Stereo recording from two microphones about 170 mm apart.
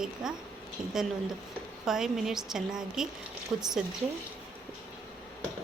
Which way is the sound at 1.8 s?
5° right (ahead or behind).